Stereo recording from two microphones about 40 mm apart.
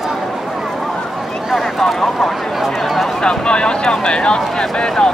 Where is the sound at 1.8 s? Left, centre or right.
Centre.